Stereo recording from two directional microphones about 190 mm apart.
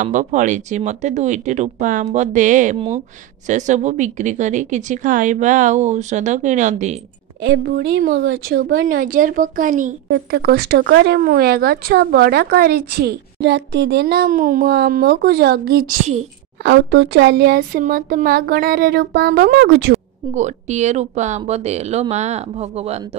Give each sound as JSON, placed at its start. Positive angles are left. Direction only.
{"t": 0.0, "sound": "speech", "side_deg": -40}
{"t": 7.4, "sound": "speech", "side_deg": -70}
{"t": 8.1, "sound": "speech", "side_deg": -80}
{"t": 8.6, "sound": "speech", "side_deg": -50}
{"t": 10.0, "sound": "speech", "side_deg": -60}
{"t": 16.6, "sound": "speech", "side_deg": -70}
{"t": 20.3, "sound": "speech", "side_deg": -40}